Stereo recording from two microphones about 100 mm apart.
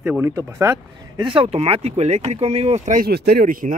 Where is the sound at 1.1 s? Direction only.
60° right (ahead or behind); by 2.8 s 90° right.